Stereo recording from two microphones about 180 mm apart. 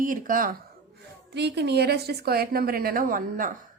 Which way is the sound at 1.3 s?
70° right (ahead or behind).